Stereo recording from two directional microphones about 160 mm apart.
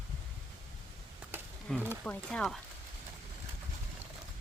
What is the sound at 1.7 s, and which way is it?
Speech, 5° left (ahead or behind).